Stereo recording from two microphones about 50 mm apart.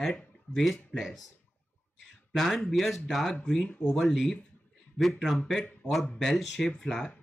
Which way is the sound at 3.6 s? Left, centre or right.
Left.